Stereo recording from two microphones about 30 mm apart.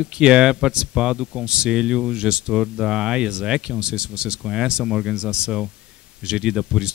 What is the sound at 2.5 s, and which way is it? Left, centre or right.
Speech, centre.